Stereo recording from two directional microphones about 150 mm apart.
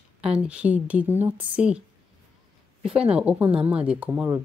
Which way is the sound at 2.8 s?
5° right (ahead or behind).